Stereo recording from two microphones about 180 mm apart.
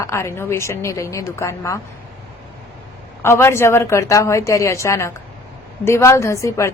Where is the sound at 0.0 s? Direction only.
15° left (ahead or behind).